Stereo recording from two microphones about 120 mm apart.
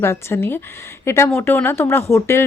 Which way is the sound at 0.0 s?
20° left (ahead or behind).